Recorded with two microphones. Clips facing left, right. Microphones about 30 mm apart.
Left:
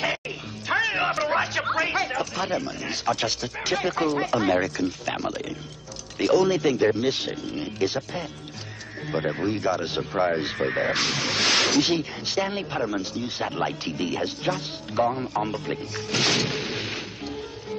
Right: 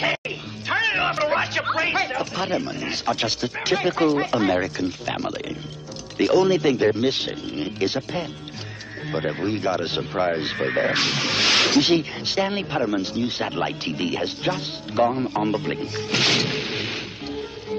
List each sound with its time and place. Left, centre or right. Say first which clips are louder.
0.7 s speech: right 2 dB; centre